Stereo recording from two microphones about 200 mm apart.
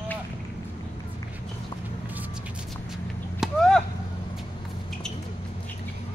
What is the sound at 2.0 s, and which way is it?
Vehicle, 10° right (ahead or behind).